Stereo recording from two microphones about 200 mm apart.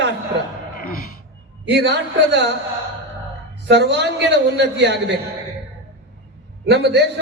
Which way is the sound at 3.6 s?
60° right (ahead or behind).